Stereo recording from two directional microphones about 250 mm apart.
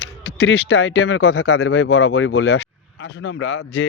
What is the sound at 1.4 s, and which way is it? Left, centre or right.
Speech, left.